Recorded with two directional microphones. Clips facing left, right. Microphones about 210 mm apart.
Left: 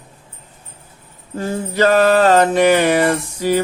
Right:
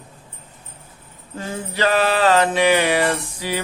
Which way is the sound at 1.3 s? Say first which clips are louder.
Left 7 dB; 45° left (ahead or behind).